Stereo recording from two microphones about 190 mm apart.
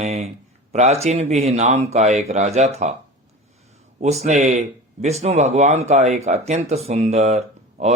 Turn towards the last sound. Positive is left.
turn(degrees=-35)  # may be behind; listen again after turning